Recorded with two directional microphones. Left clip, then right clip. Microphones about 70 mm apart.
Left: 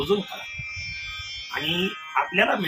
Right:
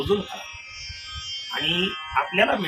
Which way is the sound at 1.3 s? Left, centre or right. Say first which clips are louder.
Right 3 dB; right.